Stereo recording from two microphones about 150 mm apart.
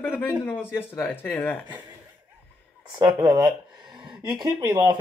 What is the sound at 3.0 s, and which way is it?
Speech, 30° right (ahead or behind).